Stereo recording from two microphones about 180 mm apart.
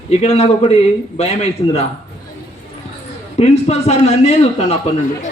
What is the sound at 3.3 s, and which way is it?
A man's voice, 35° left (ahead or behind).